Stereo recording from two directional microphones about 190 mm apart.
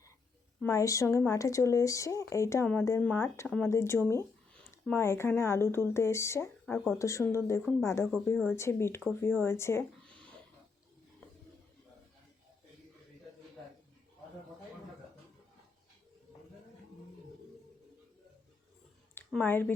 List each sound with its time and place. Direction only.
0.6 s speech: 15° left (ahead or behind)
6.7 s speech: centre (ahead or behind)
7.0 s speech: 15° left (ahead or behind)
19.3 s speech: 10° left (ahead or behind)